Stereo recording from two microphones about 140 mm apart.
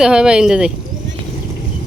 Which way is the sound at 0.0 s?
5° right (ahead or behind).